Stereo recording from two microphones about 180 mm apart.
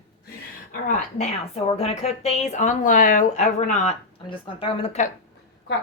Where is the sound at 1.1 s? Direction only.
35° left (ahead or behind).